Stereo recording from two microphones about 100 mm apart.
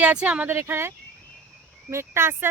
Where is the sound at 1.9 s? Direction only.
25° right (ahead or behind).